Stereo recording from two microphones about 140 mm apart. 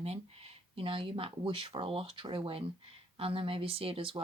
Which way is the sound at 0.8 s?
40° right (ahead or behind).